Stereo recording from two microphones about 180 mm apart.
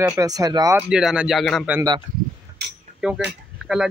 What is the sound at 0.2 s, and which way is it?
Speech, 20° right (ahead or behind).